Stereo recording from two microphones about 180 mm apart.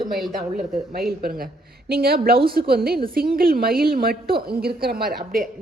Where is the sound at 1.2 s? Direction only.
55° right (ahead or behind).